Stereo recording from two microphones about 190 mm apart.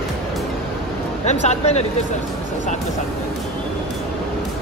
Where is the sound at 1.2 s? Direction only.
35° left (ahead or behind).